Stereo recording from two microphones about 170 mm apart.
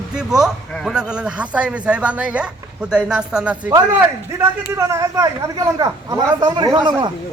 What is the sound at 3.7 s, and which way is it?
Speech, 15° right (ahead or behind).